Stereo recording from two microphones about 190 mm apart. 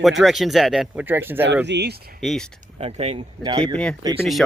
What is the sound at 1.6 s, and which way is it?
Speech, 65° right (ahead or behind).